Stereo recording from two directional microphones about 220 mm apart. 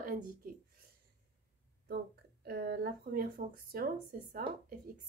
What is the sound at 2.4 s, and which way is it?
A woman's voice, 45° right (ahead or behind).